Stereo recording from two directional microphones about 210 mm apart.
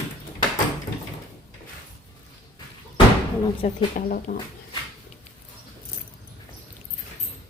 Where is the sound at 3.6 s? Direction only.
35° left (ahead or behind).